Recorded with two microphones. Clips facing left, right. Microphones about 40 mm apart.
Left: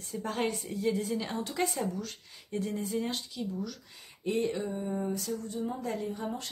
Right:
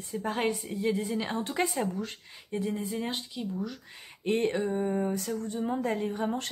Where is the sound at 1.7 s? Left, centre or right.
Centre.